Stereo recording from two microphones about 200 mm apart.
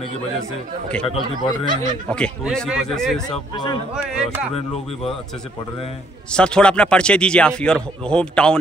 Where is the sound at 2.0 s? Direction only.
5° left (ahead or behind).